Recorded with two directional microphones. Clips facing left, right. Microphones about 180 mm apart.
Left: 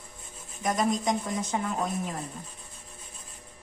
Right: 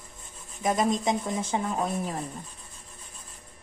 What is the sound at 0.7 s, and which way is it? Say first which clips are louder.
Speech: even; 25° right (ahead or behind).